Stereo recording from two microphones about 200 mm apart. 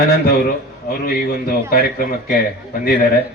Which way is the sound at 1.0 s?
45° left (ahead or behind).